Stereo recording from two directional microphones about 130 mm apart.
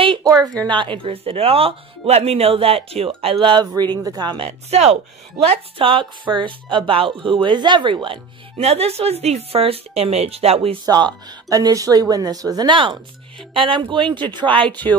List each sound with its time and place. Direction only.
0.2 s a sound: 30° right (ahead or behind)
0.7 s speech: 40° right (ahead or behind)
4.5 s speech: 55° right (ahead or behind)
5.5 s speech: 45° right (ahead or behind)
10.9 s speech: 35° right (ahead or behind)